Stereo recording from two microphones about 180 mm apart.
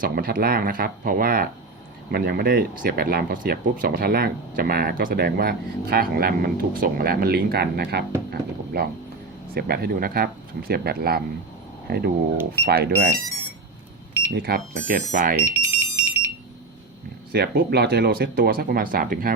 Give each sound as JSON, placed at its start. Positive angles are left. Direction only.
{"t": 0.0, "sound": "speech", "side_deg": -55}
{"t": 14.3, "sound": "speech", "side_deg": -60}
{"t": 15.5, "sound": "alarm", "side_deg": -15}
{"t": 17.3, "sound": "speech", "side_deg": -60}